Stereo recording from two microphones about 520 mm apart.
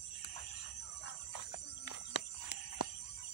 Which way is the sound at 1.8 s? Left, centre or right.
Left.